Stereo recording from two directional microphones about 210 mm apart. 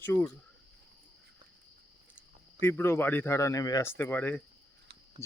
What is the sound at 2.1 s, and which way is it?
Speech, 10° left (ahead or behind).